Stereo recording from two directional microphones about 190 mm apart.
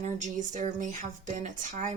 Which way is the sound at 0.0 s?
40° right (ahead or behind).